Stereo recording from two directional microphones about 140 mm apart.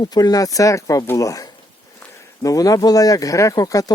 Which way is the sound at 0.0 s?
30° left (ahead or behind).